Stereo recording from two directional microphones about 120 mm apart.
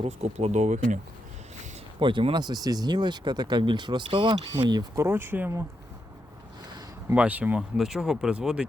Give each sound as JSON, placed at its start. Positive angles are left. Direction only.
{"t": 0.0, "sound": "speech", "side_deg": -65}
{"t": 2.0, "sound": "speech", "side_deg": -45}
{"t": 4.6, "sound": "speech", "side_deg": -35}
{"t": 5.0, "sound": "speech", "side_deg": -20}
{"t": 7.1, "sound": "speech", "side_deg": -15}